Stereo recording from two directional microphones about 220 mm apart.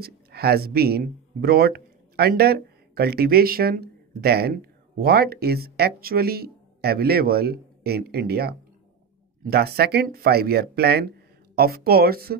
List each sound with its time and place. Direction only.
0.0 s speech: 45° right (ahead or behind)